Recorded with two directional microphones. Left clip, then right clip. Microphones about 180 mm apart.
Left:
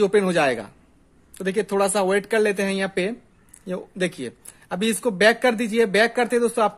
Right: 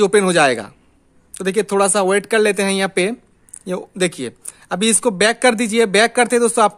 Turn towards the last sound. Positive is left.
turn(degrees=-40)  # may be behind; listen again after turning